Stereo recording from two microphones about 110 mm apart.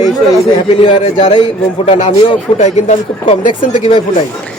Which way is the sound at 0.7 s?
50° left (ahead or behind).